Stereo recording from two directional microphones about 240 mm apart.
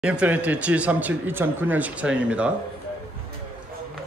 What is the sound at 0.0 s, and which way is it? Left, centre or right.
Speech, centre.